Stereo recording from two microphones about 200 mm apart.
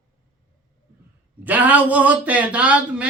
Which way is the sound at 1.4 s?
10° right (ahead or behind).